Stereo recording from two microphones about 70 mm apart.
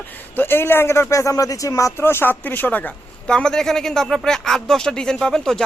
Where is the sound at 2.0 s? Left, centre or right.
Left.